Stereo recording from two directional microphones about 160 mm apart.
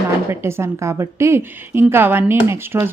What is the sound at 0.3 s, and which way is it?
Speech, 15° right (ahead or behind).